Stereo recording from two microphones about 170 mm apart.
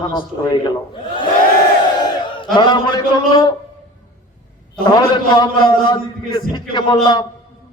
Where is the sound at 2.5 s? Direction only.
25° left (ahead or behind).